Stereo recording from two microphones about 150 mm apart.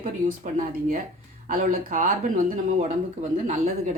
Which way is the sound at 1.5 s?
70° right (ahead or behind).